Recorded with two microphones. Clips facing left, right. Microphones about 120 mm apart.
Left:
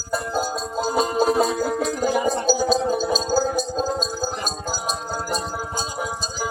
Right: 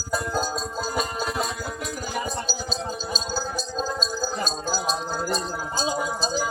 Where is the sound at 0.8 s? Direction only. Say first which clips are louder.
Left 9 dB; 25° left (ahead or behind).